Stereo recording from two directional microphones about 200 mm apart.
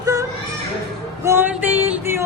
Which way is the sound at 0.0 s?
15° right (ahead or behind).